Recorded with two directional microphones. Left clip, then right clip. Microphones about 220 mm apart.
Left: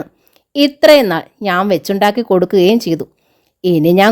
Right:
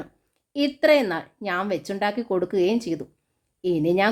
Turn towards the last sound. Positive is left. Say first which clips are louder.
# left 11 dB
turn(degrees=45)  # may be behind; listen again after turning